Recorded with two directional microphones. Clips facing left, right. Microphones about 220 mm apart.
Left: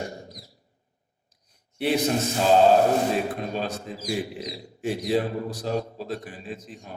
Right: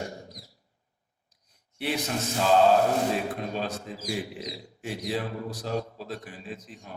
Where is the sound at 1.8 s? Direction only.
25° left (ahead or behind).